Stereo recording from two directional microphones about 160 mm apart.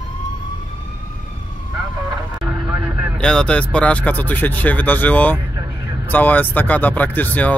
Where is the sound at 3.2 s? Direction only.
5° left (ahead or behind).